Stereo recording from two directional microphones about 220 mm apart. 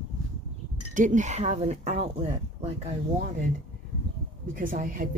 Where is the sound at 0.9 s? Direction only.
35° right (ahead or behind).